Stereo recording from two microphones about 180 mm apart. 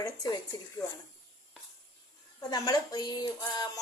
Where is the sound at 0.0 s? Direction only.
20° left (ahead or behind).